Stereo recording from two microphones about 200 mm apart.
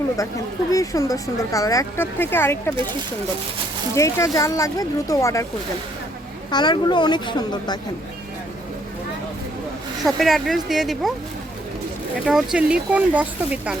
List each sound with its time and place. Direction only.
0.7 s speech: 15° left (ahead or behind)
3.9 s speech: 15° left (ahead or behind)
6.5 s speech: 20° left (ahead or behind)
10.0 s speech: centre (ahead or behind)
12.2 s speech: centre (ahead or behind)